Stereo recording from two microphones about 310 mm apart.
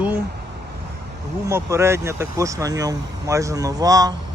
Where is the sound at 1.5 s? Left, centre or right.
Centre.